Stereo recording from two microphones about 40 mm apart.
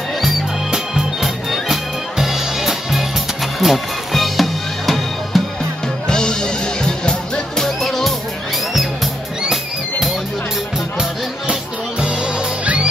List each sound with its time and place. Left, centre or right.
1.2 s music: centre
6.0 s music: centre
9.5 s music: centre